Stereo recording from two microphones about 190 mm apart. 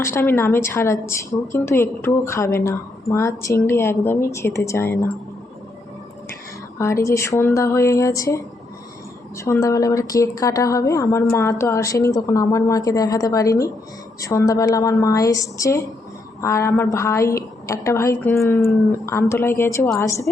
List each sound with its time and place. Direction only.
0.0 s a woman's voice: 15° left (ahead or behind)
6.7 s a woman's voice: 15° left (ahead or behind)
9.4 s a woman's voice: 15° left (ahead or behind)